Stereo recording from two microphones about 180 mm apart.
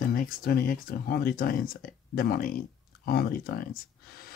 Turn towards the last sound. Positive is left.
turn(degrees=55)  # may be behind; listen again after turning